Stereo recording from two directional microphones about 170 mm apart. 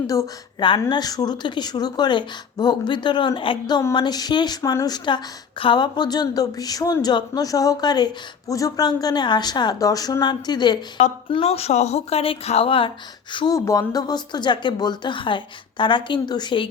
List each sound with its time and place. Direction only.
0.1 s a woman's voice: 25° left (ahead or behind)
11.3 s a woman's voice: 35° left (ahead or behind)